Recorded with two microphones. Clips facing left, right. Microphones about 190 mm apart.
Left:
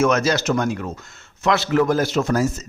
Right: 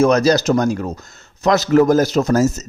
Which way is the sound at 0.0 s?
35° right (ahead or behind).